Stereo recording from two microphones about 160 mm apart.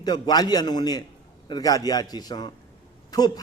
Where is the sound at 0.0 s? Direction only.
25° left (ahead or behind).